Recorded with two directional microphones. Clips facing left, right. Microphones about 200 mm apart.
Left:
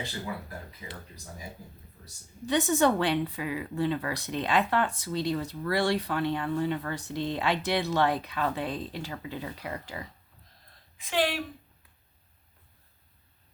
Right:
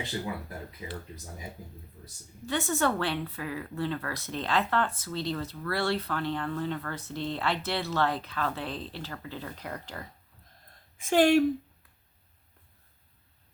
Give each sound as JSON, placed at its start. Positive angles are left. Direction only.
{"t": 2.5, "sound": "speech", "side_deg": 15}
{"t": 10.9, "sound": "a woman's voice", "side_deg": -45}